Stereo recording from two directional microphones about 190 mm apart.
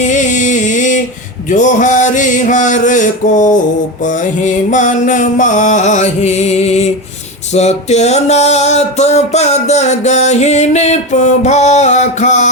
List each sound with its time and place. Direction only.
0.0 s music: 40° left (ahead or behind)